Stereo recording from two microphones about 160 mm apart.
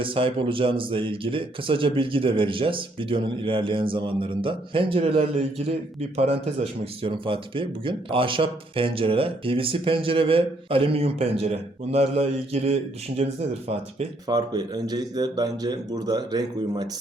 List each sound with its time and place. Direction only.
0.0 s speech: 35° right (ahead or behind)
14.3 s a man's voice: 25° right (ahead or behind)